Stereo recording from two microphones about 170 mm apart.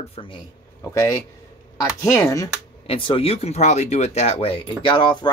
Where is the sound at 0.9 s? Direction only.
15° left (ahead or behind).